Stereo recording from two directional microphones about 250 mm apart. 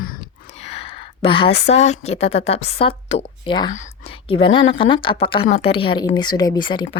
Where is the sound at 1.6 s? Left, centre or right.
Left.